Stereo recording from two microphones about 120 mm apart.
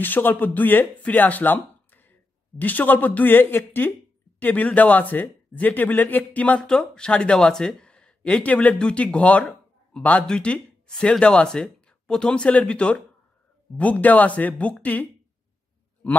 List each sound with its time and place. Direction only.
0.0 s speech: 15° left (ahead or behind)